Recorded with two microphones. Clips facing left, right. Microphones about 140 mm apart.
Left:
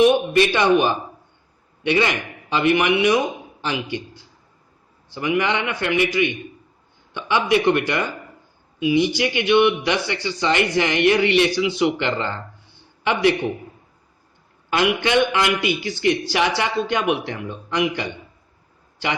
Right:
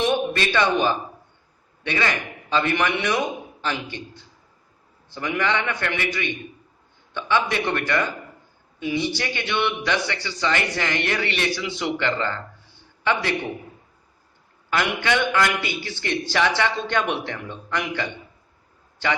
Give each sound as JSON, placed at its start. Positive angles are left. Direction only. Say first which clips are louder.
{"t": 0.0, "sound": "a man's voice", "louder": "left 7 dB", "side_deg": 15}
{"t": 14.7, "sound": "a man's voice", "louder": "left 4 dB", "side_deg": 20}